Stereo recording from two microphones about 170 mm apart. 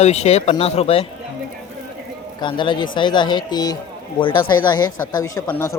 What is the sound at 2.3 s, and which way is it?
Speech, 30° left (ahead or behind).